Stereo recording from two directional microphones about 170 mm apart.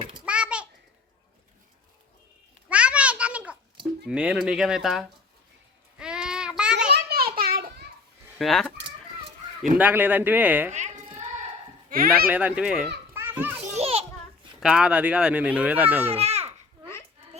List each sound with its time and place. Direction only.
0.3 s a sound: 5° right (ahead or behind)
2.6 s a sound: 5° right (ahead or behind)
4.0 s speech: 5° right (ahead or behind)
6.0 s child singing: 5° right (ahead or behind)
6.9 s children playing: 65° right (ahead or behind)
8.4 s speech: centre (ahead or behind)
9.7 s speech: 10° right (ahead or behind)
10.7 s a sound: 45° right (ahead or behind)
11.9 s speech: 60° right (ahead or behind)
12.3 s a child's voice: 10° right (ahead or behind)
13.7 s children playing: 35° right (ahead or behind)
14.6 s speech: 5° right (ahead or behind)
16.1 s a sound: 35° right (ahead or behind)